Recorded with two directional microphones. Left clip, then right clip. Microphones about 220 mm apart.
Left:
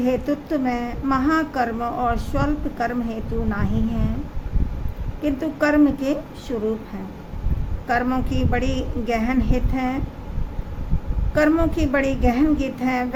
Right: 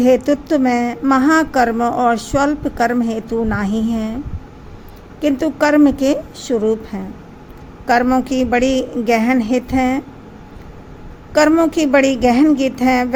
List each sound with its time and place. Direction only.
0.0 s speech: 30° right (ahead or behind)
5.2 s speech: 30° right (ahead or behind)
11.3 s speech: 30° right (ahead or behind)